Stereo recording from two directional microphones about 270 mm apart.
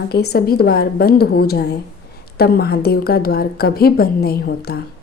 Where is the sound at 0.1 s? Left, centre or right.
Left.